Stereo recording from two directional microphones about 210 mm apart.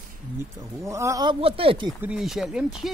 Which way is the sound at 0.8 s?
15° right (ahead or behind).